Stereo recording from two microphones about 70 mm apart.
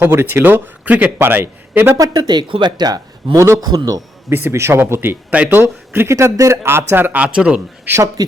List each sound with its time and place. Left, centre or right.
0.0 s a man's voice: right
2.0 s speech: right
3.3 s a man's voice: right
3.6 s a man's voice: right
4.3 s a man's voice: right
4.9 s a man's voice: right
7.2 s speech: centre